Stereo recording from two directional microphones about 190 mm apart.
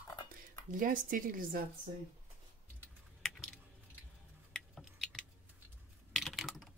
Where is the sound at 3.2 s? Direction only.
5° left (ahead or behind).